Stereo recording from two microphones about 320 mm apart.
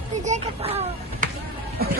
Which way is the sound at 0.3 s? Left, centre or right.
Centre.